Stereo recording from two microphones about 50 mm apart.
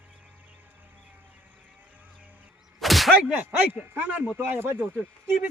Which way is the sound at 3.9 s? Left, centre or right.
Right.